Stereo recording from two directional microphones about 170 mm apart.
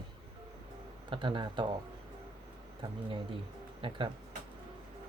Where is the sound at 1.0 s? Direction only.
30° right (ahead or behind).